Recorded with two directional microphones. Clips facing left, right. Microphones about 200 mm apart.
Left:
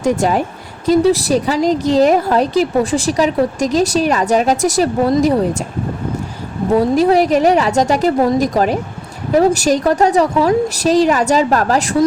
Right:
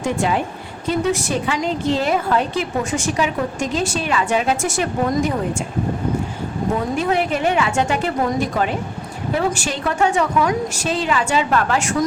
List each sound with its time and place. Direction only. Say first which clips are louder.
0.0 s a woman's voice: left 5 dB; 40° left (ahead or behind)
6.7 s a woman's voice: left 10 dB; 35° left (ahead or behind)